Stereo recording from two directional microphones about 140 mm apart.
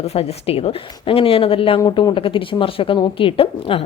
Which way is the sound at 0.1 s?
45° left (ahead or behind).